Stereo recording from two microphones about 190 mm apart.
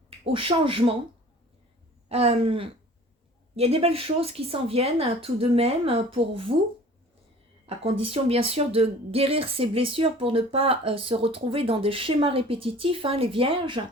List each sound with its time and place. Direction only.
0.3 s a woman's voice: 30° right (ahead or behind)
2.0 s speech: 35° right (ahead or behind)
7.8 s a woman's voice: 30° right (ahead or behind)